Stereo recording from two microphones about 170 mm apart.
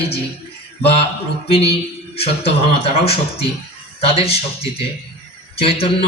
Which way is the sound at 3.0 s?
35° left (ahead or behind).